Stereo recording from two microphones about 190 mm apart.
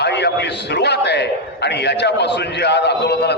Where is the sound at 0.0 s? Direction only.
60° left (ahead or behind).